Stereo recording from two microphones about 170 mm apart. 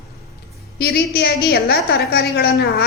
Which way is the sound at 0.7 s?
65° left (ahead or behind).